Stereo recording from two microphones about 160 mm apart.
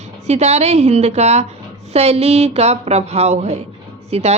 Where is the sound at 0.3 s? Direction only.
45° right (ahead or behind).